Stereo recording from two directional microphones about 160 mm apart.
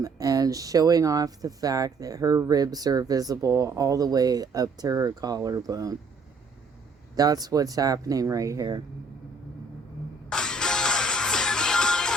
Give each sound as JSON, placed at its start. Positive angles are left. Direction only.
{"t": 0.0, "sound": "speech", "side_deg": -20}
{"t": 7.2, "sound": "speech", "side_deg": -25}
{"t": 10.2, "sound": "music", "side_deg": 5}